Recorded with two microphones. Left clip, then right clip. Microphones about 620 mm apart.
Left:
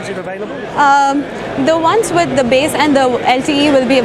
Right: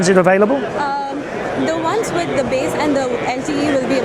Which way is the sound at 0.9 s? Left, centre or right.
Left.